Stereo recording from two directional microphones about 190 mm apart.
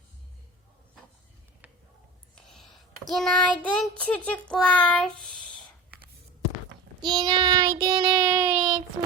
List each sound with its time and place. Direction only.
2.5 s a sound: centre (ahead or behind)
3.1 s child singing: centre (ahead or behind)
7.0 s child singing: 25° right (ahead or behind)